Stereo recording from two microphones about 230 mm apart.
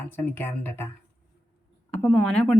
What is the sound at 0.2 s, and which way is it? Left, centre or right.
Speech, centre.